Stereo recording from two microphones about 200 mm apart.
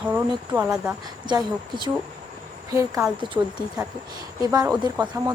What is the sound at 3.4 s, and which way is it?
Speech, 20° right (ahead or behind).